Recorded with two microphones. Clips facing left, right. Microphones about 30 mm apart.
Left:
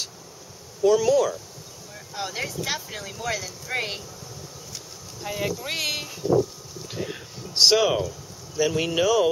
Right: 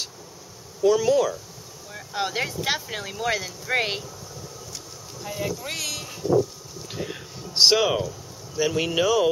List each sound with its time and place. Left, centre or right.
0.8 s speech: centre
2.0 s speech: right
5.2 s speech: centre
6.9 s speech: centre